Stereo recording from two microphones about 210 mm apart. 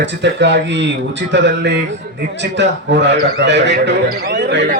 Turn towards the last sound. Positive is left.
turn(degrees=-55)  # may be behind; listen again after turning